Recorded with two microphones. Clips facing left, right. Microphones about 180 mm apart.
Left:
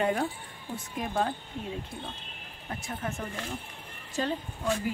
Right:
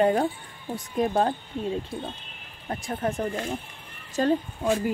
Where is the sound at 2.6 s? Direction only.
40° right (ahead or behind).